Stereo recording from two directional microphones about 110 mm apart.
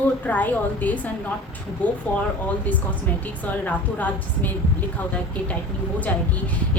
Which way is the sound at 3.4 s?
15° left (ahead or behind).